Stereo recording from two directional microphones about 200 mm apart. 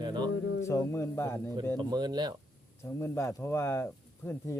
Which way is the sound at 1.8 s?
20° right (ahead or behind).